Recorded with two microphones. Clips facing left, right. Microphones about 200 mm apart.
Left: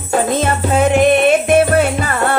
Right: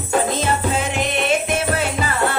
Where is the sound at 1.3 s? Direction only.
55° left (ahead or behind).